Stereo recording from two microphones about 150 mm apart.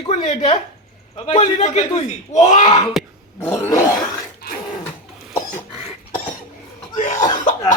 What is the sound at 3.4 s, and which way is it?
Roar, 15° left (ahead or behind).